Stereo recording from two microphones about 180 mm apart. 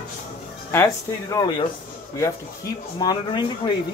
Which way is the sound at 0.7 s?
20° left (ahead or behind).